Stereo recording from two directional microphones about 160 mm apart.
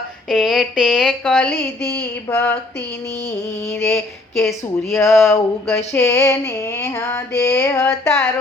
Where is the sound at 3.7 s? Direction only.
15° left (ahead or behind).